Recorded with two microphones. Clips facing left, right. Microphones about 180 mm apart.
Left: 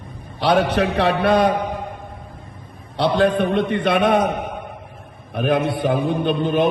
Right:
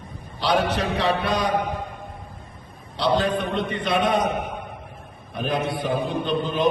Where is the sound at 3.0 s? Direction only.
60° left (ahead or behind).